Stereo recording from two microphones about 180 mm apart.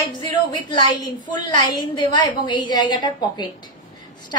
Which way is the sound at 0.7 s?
25° left (ahead or behind).